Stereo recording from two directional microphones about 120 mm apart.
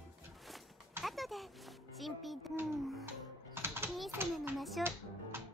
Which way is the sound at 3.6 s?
20° right (ahead or behind).